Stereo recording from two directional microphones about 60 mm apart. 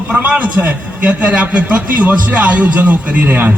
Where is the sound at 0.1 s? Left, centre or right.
Right.